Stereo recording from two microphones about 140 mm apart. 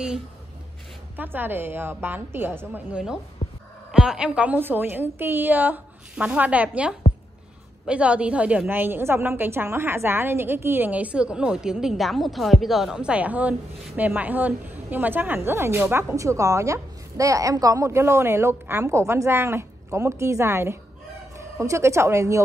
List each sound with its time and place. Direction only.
1.1 s a woman's voice: 15° right (ahead or behind)